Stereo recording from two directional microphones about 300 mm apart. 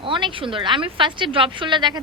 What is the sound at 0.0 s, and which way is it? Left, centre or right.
A woman's voice, centre.